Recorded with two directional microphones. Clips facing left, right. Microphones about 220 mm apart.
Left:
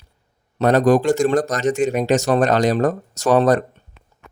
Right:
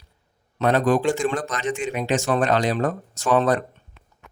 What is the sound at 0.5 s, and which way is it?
Speech, 40° left (ahead or behind).